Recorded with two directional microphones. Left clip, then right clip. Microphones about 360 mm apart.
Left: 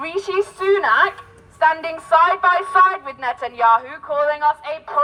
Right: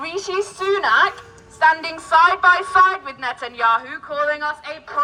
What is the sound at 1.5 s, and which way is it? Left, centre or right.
A woman's voice, left.